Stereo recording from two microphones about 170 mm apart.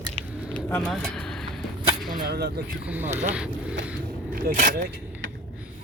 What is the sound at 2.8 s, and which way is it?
Speech, 10° right (ahead or behind).